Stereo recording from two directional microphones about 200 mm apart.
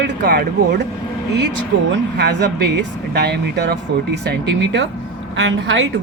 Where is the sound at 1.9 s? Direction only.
55° right (ahead or behind).